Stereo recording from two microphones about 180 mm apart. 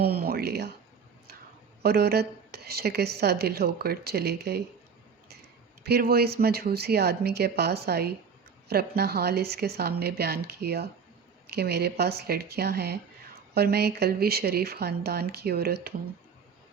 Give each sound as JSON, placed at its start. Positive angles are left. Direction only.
{"t": 0.0, "sound": "speech", "side_deg": -60}
{"t": 1.8, "sound": "speech", "side_deg": -60}
{"t": 5.8, "sound": "speech", "side_deg": -60}